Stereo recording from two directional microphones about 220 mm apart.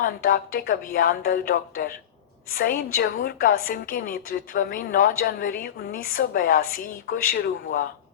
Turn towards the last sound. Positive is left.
turn(degrees=45)  # may be behind; listen again after turning